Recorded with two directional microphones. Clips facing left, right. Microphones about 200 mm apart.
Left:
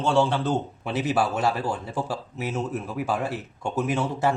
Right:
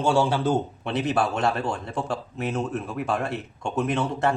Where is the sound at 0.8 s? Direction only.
5° left (ahead or behind).